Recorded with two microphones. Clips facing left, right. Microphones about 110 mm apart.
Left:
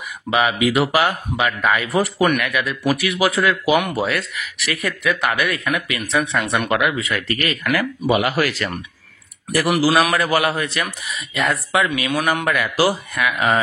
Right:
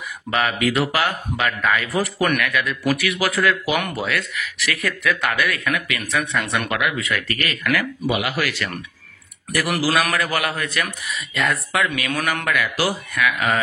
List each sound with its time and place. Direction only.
0.3 s speech: 15° left (ahead or behind)
8.1 s speech: 40° left (ahead or behind)
9.5 s speech: 25° left (ahead or behind)